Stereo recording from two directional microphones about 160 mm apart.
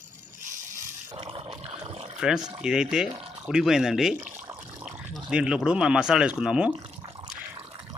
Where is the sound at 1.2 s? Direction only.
35° right (ahead or behind).